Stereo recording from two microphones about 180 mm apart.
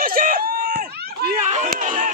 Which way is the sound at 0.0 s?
50° right (ahead or behind).